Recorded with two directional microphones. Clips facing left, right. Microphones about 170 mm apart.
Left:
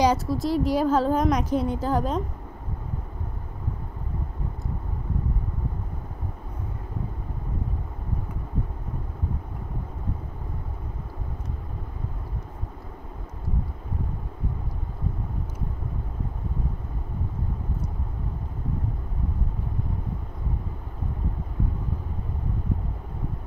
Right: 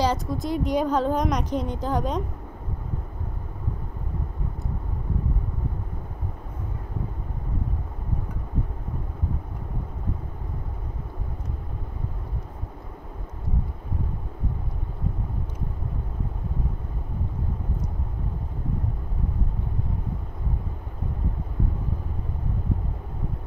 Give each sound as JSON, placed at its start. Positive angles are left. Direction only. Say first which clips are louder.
{"t": 0.0, "sound": "a woman's voice", "louder": "left 3 dB", "side_deg": 10}